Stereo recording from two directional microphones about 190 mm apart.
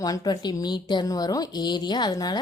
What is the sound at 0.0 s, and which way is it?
Speech, 20° left (ahead or behind).